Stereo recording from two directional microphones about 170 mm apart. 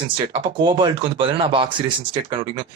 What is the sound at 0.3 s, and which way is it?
Speech, 30° right (ahead or behind).